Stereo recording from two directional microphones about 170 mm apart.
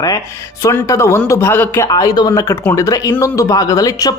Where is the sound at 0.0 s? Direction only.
20° left (ahead or behind).